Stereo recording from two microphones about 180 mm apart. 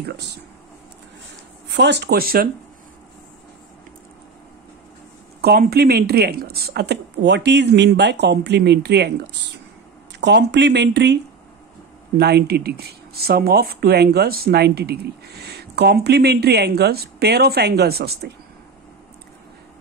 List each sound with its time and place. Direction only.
1.7 s speech: 70° right (ahead or behind)
5.4 s speech: 60° right (ahead or behind)
10.2 s speech: 75° right (ahead or behind)
12.2 s speech: 65° right (ahead or behind)